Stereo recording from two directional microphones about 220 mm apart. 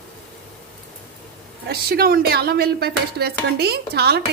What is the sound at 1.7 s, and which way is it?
Speech, 45° right (ahead or behind).